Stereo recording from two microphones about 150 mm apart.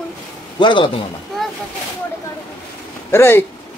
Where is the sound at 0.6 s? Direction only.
35° left (ahead or behind).